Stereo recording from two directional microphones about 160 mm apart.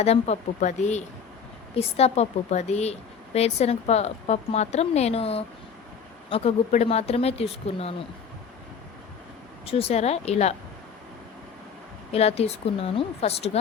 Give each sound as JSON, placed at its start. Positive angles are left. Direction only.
{"t": 0.0, "sound": "a woman's voice", "side_deg": 45}
{"t": 9.6, "sound": "a woman's voice", "side_deg": 40}
{"t": 12.1, "sound": "a woman's voice", "side_deg": 40}